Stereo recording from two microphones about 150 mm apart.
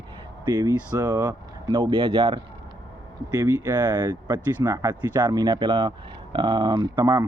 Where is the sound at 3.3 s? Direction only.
25° right (ahead or behind).